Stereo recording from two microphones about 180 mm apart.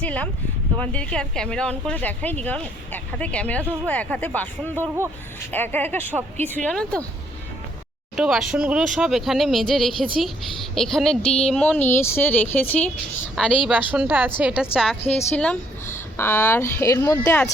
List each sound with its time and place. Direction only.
0.0 s speech: 10° left (ahead or behind)
5.5 s speech: 10° left (ahead or behind)
8.1 s a woman's voice: centre (ahead or behind)
13.7 s a woman's voice: 5° right (ahead or behind)
15.0 s a woman's voice: 35° left (ahead or behind)
16.1 s speech: 15° left (ahead or behind)